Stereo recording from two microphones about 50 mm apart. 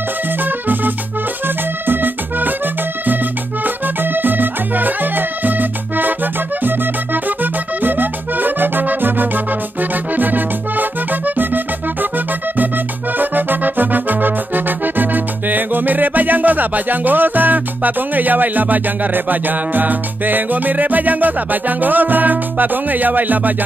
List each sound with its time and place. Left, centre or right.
0.4 s music: right